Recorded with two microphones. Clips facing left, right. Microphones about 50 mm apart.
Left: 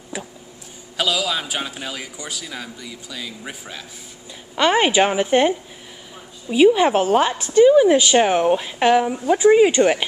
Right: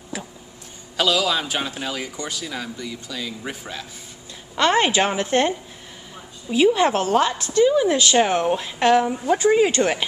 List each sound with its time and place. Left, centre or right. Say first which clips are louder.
0.9 s a man's voice: right 2 dB; centre
6.5 s a woman's voice: left 3 dB; centre